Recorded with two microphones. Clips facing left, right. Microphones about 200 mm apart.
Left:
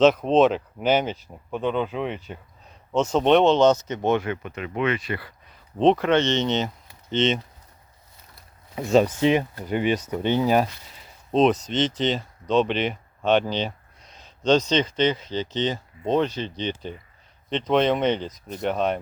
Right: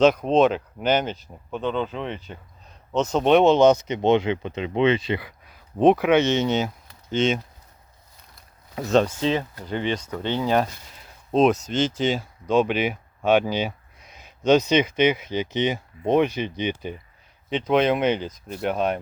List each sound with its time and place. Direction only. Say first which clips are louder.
0.0 s speech: even; centre (ahead or behind)
3.1 s speech: right 1 dB; 5° right (ahead or behind); by 5.2 s 25° right (ahead or behind)
5.2 s speech: right 2 dB; 10° right (ahead or behind)
8.7 s speech: left 1 dB; centre (ahead or behind)
9.2 s speech: left 3 dB; 15° left (ahead or behind)
11.0 s speech: right 1 dB; 5° right (ahead or behind)